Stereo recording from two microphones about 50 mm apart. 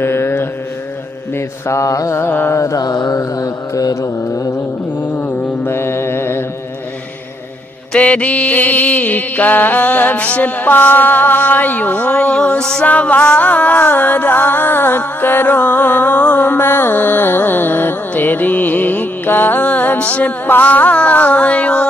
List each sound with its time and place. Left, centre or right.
0.0 s mantra: left
1.7 s mantra: left
2.2 s music: left
2.5 s mantra: left
3.9 s mantra: left
5.0 s mantra: left
5.7 s mantra: left
7.9 s music: left
12.3 s music: centre
12.8 s music: left
20.4 s music: left